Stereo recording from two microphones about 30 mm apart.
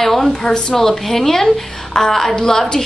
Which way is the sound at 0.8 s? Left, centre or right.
Centre.